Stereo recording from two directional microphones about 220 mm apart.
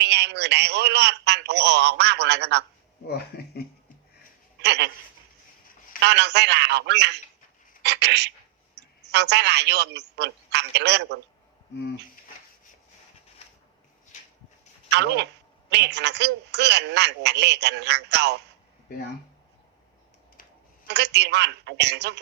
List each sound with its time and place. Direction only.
0.0 s a woman's voice: 50° right (ahead or behind)
3.1 s speech: 45° left (ahead or behind)
4.6 s a woman's voice: 50° right (ahead or behind)
6.0 s a woman's voice: 50° right (ahead or behind)
7.8 s a sound: 50° right (ahead or behind)
9.1 s a woman's voice: 50° right (ahead or behind)
14.8 s a woman's voice: 50° right (ahead or behind)
20.8 s a woman's voice: 50° right (ahead or behind)